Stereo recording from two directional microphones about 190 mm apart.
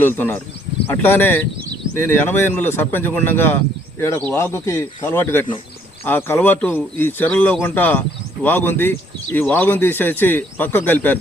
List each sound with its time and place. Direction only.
0.0 s speech: 10° left (ahead or behind)